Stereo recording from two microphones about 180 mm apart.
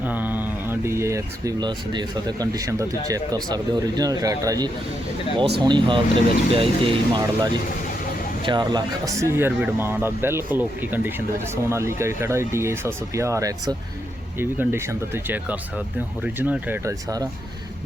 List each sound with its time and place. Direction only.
0.0 s speech: 10° right (ahead or behind)